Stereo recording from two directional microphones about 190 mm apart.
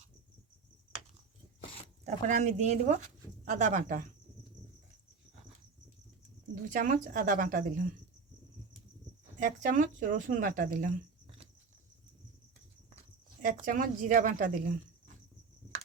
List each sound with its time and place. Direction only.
2.0 s speech: 40° right (ahead or behind)
6.5 s speech: 45° right (ahead or behind)
9.4 s speech: 40° right (ahead or behind)
13.4 s speech: 45° right (ahead or behind)